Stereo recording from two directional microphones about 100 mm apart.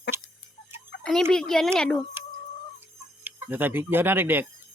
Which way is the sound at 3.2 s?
20° right (ahead or behind).